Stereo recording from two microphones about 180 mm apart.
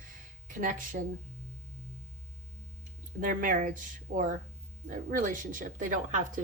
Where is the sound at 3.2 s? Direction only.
50° right (ahead or behind).